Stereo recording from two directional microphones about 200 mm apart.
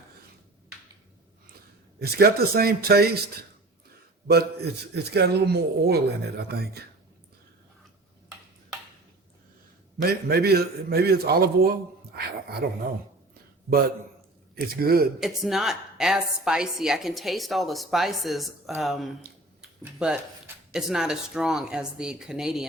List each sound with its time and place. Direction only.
2.0 s a man's voice: 50° right (ahead or behind)
4.3 s a man's voice: 55° right (ahead or behind)
10.0 s a man's voice: 50° right (ahead or behind)
14.5 s a man's voice: 50° right (ahead or behind)
15.2 s a woman's voice: centre (ahead or behind)